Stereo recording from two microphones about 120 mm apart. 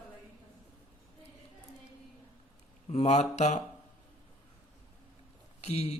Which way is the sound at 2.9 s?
70° left (ahead or behind).